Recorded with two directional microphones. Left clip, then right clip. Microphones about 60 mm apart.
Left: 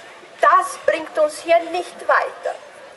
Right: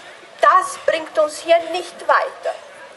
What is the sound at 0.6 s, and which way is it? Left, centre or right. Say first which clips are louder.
A woman's voice: right 1 dB; centre.